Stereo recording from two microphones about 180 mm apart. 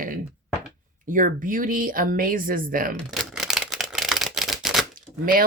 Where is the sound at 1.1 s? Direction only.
50° right (ahead or behind).